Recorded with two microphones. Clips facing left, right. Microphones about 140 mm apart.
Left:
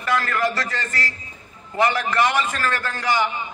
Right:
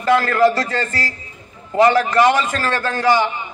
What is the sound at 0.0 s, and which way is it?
A man's voice, 35° right (ahead or behind).